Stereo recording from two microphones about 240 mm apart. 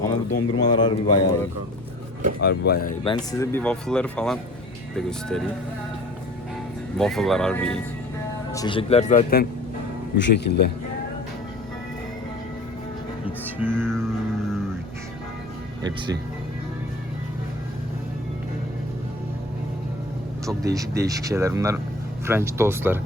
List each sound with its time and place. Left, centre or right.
0.1 s speech: centre
2.4 s speech: left
3.0 s speech: centre
6.9 s speech: centre
8.5 s speech: centre; by 10.7 s left
13.2 s music: centre
20.6 s speech: centre